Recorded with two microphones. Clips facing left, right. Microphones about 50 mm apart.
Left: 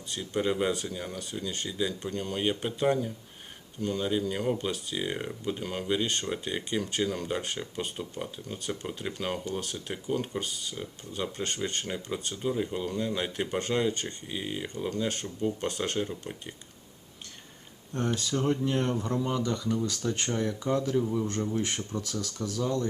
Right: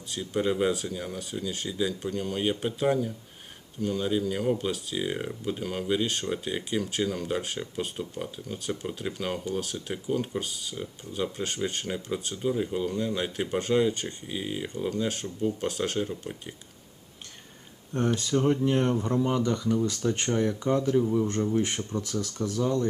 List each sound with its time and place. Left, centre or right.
0.1 s speech: centre
18.2 s speech: centre
19.2 s speech: right
22.0 s speech: right